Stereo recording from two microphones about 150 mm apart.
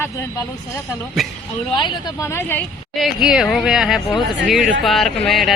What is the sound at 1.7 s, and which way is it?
Speech, 30° left (ahead or behind).